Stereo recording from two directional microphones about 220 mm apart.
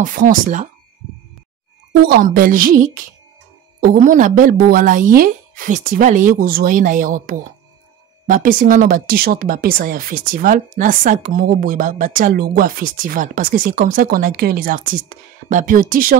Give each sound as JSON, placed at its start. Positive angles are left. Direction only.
{"t": 0.0, "sound": "speech", "side_deg": -40}
{"t": 1.9, "sound": "speech", "side_deg": -45}